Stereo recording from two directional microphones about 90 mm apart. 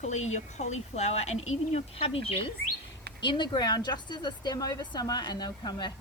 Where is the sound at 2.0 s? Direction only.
90° left.